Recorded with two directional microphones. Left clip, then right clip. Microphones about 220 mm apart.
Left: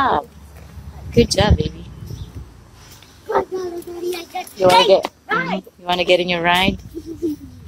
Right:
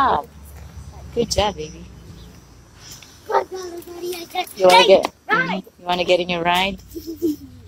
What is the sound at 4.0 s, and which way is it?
A child's voice, 45° right (ahead or behind).